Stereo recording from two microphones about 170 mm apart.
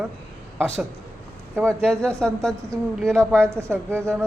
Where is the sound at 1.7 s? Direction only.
5° left (ahead or behind).